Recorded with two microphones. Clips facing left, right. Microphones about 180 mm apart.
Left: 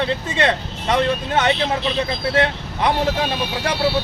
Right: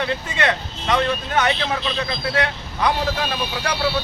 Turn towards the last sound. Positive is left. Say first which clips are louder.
# left 3 dB
turn(degrees=25)  # may be behind; listen again after turning